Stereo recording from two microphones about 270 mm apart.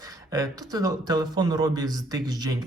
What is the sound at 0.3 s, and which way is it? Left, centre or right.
Speech, centre.